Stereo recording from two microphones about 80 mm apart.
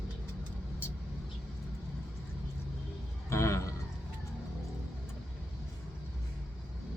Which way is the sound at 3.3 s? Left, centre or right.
Left.